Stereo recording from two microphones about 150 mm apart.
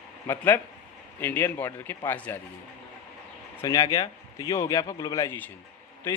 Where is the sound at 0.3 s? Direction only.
15° left (ahead or behind).